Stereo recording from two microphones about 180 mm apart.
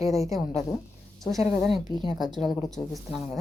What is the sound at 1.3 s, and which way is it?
Speech, 15° right (ahead or behind).